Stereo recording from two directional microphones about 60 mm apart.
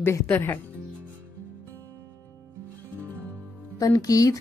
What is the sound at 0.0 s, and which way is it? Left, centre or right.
Speech, left.